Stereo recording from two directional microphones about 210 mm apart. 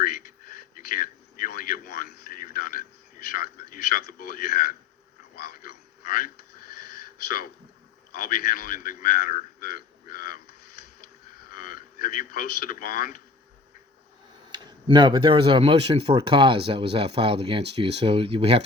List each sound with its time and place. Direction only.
0.0 s a sound: 45° left (ahead or behind)
3.3 s a man's voice: 45° left (ahead or behind)
5.4 s a sound: 45° left (ahead or behind)
7.3 s a man's voice: 45° left (ahead or behind)
11.5 s a man's voice: 45° left (ahead or behind)
14.5 s speech: 20° right (ahead or behind)